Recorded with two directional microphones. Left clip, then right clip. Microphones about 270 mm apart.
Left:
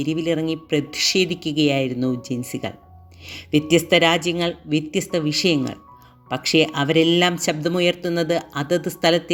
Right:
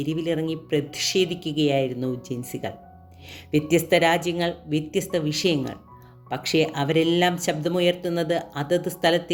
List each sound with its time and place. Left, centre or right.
0.0 s speech: centre